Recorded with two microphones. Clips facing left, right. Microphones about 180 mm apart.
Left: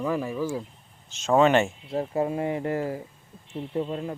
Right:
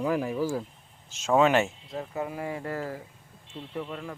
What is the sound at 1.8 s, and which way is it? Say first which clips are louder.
Speech: left 7 dB; 30° left (ahead or behind).